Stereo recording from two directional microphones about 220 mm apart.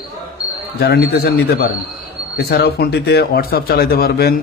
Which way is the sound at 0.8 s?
45° left (ahead or behind).